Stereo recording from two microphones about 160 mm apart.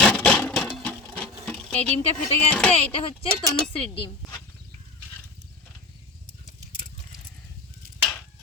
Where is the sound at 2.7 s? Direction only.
40° left (ahead or behind).